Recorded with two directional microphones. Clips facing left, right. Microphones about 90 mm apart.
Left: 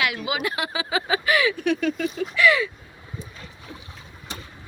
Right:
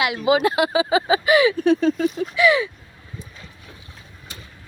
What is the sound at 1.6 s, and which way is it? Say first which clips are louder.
Speech: right 6 dB; 30° right (ahead or behind).